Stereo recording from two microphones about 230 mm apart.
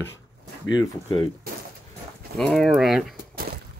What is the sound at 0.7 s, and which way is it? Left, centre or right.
Speech, centre.